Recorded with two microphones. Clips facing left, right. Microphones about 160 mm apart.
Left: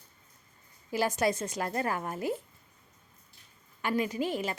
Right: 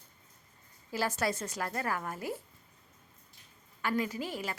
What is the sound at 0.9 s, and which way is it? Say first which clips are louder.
A woman's voice: left 4 dB; 15° left (ahead or behind).